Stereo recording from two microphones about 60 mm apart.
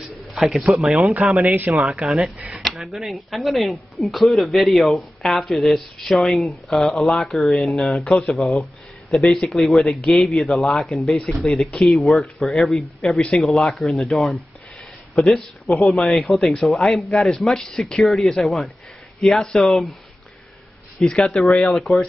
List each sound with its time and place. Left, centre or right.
0.4 s speech: centre
1.3 s speech: right
1.7 s speech: centre
2.3 s speech: right
2.6 s speech: centre
21.0 s speech: centre